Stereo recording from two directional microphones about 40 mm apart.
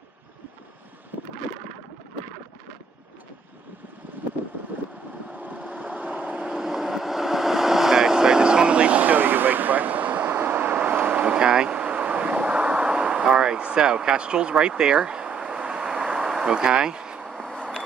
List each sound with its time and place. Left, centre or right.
5.3 s vehicle: right
6.5 s vehicle: centre; by 9.2 s right
9.2 s vehicle: right